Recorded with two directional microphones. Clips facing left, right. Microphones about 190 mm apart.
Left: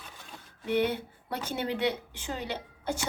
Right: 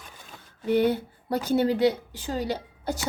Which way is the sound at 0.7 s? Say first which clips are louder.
Right 5 dB; 40° right (ahead or behind).